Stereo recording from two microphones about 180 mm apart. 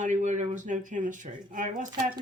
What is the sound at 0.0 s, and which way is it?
Speech, 40° right (ahead or behind).